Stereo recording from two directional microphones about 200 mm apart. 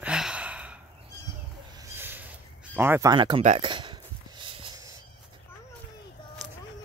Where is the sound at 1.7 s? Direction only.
10° right (ahead or behind).